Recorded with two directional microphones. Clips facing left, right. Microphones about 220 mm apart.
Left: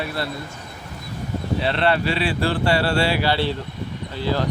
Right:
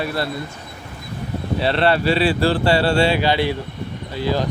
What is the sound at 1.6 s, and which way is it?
Speech, 35° right (ahead or behind).